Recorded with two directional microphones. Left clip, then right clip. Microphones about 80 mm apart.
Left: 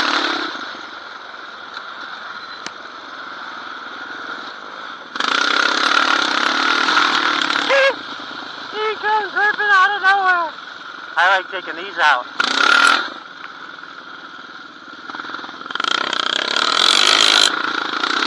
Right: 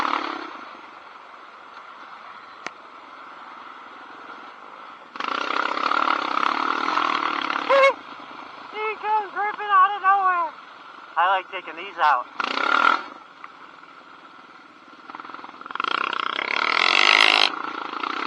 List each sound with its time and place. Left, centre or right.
0.0 s a sound: left
5.1 s chainsaw: left
8.7 s a sound: centre
11.5 s speech: centre
12.1 s chainsaw: left
15.3 s burping: left
17.5 s vehicle: left